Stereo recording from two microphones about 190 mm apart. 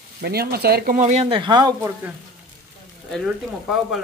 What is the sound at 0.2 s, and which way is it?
Speech, 55° right (ahead or behind).